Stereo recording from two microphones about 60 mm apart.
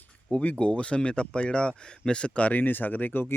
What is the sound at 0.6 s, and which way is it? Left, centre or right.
Speech, centre.